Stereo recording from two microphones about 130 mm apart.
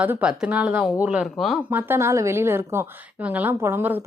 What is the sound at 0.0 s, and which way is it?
Speech, 10° right (ahead or behind).